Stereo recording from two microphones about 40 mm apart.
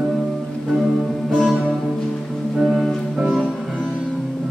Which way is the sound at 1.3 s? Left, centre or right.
Centre.